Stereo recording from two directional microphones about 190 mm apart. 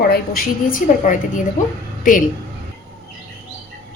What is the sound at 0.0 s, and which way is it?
A woman's voice, 55° left (ahead or behind).